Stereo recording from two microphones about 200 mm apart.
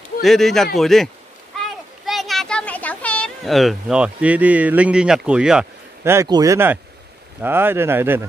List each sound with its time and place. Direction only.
0.2 s speech: centre (ahead or behind)
1.6 s a sound: centre (ahead or behind)
6.1 s speech: 20° right (ahead or behind)